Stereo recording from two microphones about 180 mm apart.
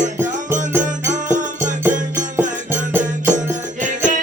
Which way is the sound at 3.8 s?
45° right (ahead or behind).